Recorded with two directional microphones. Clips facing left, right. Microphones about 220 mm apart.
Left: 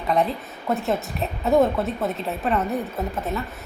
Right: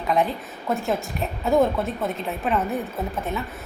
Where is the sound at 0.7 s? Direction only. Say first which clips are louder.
Left 1 dB; centre (ahead or behind).